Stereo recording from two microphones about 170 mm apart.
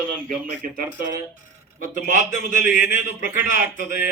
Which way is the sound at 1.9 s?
50° left (ahead or behind).